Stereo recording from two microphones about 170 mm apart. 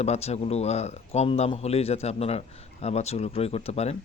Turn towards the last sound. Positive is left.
turn(degrees=40)  # may be behind; listen again after turning